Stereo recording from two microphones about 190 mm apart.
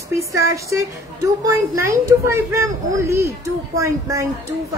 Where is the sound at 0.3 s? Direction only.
15° right (ahead or behind).